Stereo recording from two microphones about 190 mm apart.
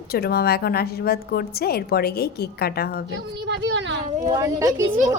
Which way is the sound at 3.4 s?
70° right (ahead or behind).